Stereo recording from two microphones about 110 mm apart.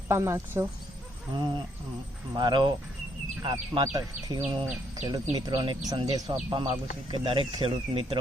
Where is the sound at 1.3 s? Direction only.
45° right (ahead or behind).